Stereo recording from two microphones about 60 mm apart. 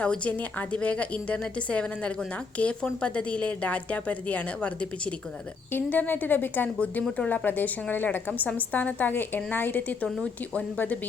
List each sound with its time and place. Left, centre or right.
0.0 s a woman's voice: left